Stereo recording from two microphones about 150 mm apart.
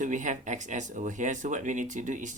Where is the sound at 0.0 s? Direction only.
55° right (ahead or behind).